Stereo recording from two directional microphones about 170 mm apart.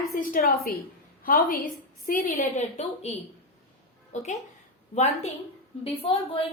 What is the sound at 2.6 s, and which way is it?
Speech, 40° left (ahead or behind).